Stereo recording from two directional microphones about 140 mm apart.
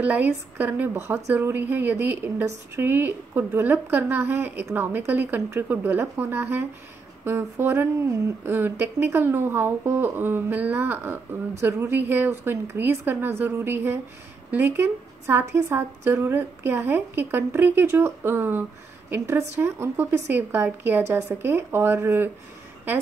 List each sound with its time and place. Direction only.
0.0 s a woman's voice: 10° right (ahead or behind)